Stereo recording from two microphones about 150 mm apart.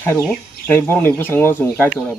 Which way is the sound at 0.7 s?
15° left (ahead or behind).